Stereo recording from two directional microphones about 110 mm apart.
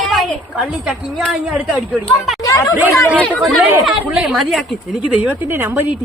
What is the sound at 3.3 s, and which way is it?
Speech, centre (ahead or behind).